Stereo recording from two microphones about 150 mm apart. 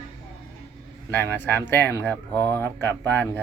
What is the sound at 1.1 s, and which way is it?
Speech, 15° left (ahead or behind).